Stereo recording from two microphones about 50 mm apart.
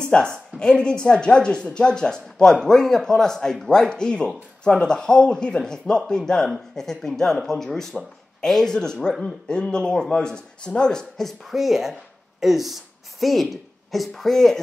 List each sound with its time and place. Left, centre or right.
0.0 s a woman's voice: centre
9.2 s speech: centre